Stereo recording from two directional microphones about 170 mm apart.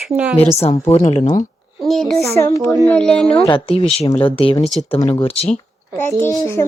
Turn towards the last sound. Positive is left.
turn(degrees=15)  # may be behind; listen again after turning